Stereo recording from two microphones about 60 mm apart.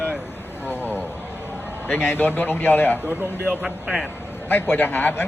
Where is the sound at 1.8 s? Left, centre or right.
Left.